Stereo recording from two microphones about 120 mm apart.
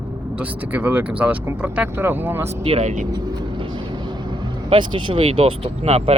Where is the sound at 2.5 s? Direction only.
60° right (ahead or behind).